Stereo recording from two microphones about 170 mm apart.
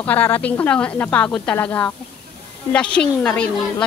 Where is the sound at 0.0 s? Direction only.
10° left (ahead or behind).